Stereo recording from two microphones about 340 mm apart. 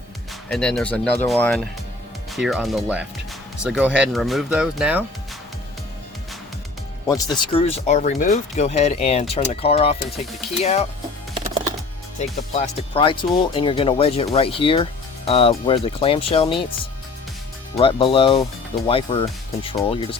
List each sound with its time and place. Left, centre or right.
0.5 s speech: centre
7.1 s speech: centre
12.2 s speech: centre